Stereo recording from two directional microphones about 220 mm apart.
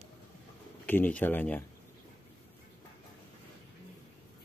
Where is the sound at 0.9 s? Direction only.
5° left (ahead or behind).